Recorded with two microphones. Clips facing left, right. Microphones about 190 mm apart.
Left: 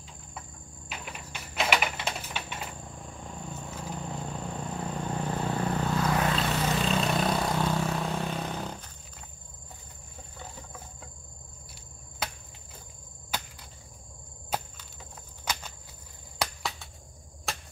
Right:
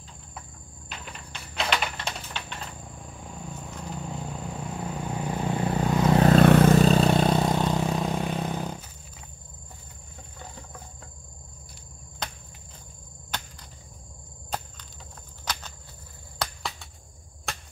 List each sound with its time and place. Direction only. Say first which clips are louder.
0.8 s a sound: left 1 dB; 5° left (ahead or behind)
3.1 s vehicle: right 1 dB; 5° right (ahead or behind)
6.3 s vehicle: right 12 dB; 55° right (ahead or behind); by 8.9 s 10° right (ahead or behind)
12.2 s cricket: even; 10° left (ahead or behind)
14.5 s cricket: left 1 dB; 10° left (ahead or behind)
16.4 s a sound: even; 10° left (ahead or behind)